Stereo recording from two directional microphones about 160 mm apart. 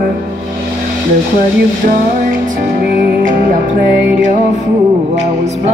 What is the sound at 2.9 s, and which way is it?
Music, 55° right (ahead or behind).